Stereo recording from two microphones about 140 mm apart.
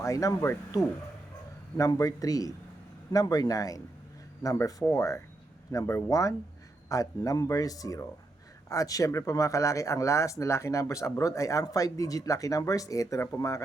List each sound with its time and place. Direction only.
0.0 s speech: 25° left (ahead or behind)